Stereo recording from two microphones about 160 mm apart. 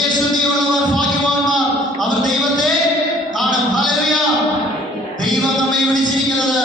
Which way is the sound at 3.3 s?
Centre (ahead or behind).